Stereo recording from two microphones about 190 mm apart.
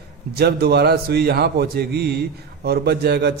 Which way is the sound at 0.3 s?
55° right (ahead or behind).